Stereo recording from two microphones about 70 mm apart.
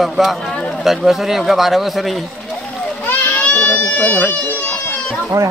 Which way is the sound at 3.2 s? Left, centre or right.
Left.